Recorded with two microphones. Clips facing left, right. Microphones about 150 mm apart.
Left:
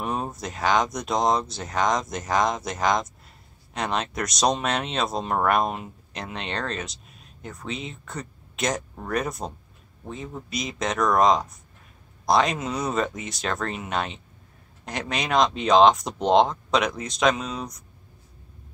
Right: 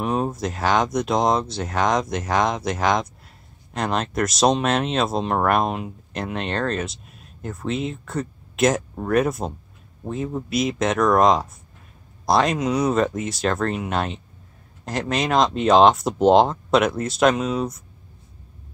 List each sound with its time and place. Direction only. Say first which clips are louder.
0.0 s speech: right 6 dB; centre (ahead or behind)
10.5 s speech: right 6 dB; centre (ahead or behind)